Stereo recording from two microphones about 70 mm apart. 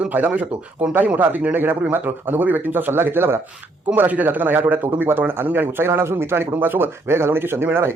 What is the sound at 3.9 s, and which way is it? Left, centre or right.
A man's voice, right.